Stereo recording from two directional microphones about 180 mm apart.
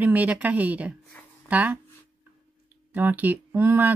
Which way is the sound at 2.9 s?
10° right (ahead or behind).